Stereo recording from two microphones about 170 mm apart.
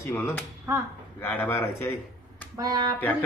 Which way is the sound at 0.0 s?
15° left (ahead or behind).